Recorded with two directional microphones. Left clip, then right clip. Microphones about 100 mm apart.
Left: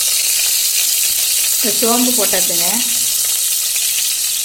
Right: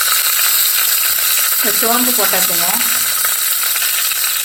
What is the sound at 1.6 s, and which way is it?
Speech, 35° left (ahead or behind).